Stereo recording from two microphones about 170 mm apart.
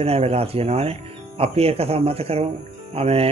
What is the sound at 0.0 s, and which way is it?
Speech, 35° right (ahead or behind).